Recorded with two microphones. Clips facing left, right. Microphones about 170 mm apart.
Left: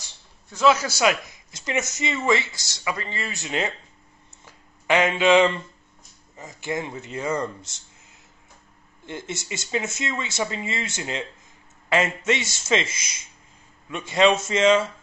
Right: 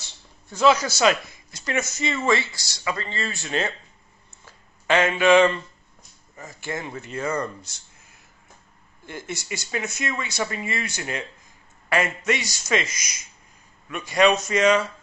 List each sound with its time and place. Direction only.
0.5 s speech: centre (ahead or behind); by 3.7 s 15° left (ahead or behind)
4.5 s a sound: 15° left (ahead or behind)
6.3 s speech: 20° left (ahead or behind)